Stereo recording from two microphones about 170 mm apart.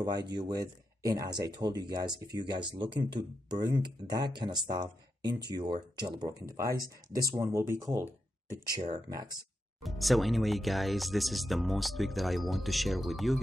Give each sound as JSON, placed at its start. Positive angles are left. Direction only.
{"t": 0.0, "sound": "speech", "side_deg": -25}
{"t": 9.8, "sound": "speech", "side_deg": 0}